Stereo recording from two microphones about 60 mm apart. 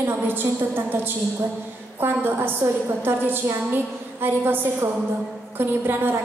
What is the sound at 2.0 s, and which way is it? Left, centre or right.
A woman's voice, right.